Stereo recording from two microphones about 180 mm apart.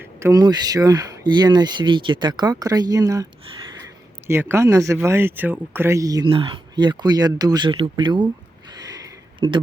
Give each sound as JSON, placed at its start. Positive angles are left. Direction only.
{"t": 0.0, "sound": "speech", "side_deg": -15}
{"t": 4.3, "sound": "speech", "side_deg": -15}